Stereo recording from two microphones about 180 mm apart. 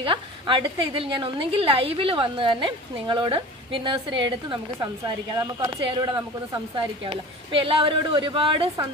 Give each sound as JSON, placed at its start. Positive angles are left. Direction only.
{"t": 0.0, "sound": "a woman's voice", "side_deg": -25}
{"t": 5.3, "sound": "a woman's voice", "side_deg": -15}